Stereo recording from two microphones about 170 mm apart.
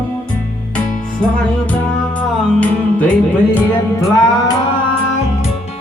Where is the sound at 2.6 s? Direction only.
10° left (ahead or behind).